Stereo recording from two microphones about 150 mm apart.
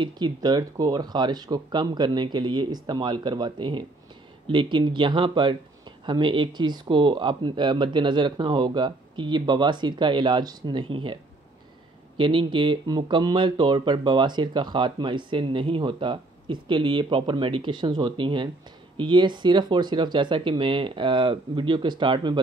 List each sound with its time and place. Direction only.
0.0 s speech: 25° right (ahead or behind)
12.2 s speech: 35° right (ahead or behind)